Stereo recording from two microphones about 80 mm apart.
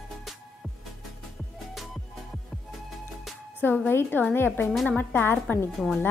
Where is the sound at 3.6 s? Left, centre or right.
Left.